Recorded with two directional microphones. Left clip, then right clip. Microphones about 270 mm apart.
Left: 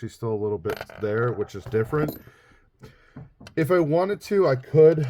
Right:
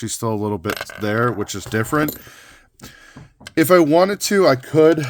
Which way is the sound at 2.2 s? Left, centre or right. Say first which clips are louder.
Right 9 dB; right.